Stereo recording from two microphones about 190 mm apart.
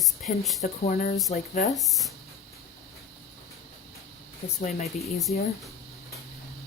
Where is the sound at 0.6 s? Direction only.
45° left (ahead or behind).